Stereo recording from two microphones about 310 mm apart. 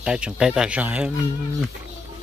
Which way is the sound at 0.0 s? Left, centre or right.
Centre.